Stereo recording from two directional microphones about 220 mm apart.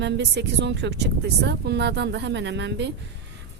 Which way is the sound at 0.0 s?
50° right (ahead or behind).